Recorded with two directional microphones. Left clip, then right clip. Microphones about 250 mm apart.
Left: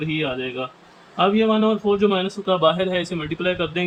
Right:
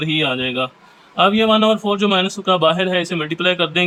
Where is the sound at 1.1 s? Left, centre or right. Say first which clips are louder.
Right 4 dB; right.